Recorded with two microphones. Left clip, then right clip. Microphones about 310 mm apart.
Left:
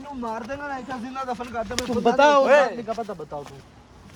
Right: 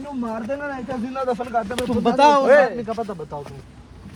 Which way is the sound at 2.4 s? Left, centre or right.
Centre.